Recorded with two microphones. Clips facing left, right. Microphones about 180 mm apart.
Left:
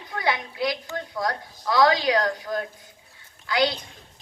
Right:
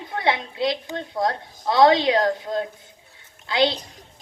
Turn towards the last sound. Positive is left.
turn(degrees=-25)  # may be behind; listen again after turning